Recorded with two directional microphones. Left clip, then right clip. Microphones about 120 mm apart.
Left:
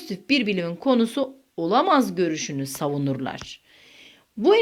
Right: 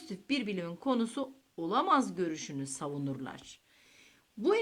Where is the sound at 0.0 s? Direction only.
25° left (ahead or behind).